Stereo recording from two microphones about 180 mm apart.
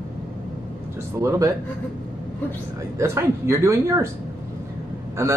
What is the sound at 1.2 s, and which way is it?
Speech, 15° right (ahead or behind).